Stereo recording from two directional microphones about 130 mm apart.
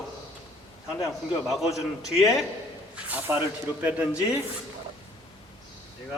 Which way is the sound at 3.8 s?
10° right (ahead or behind).